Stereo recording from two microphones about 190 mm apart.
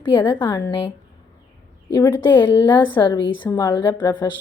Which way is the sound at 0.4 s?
10° left (ahead or behind).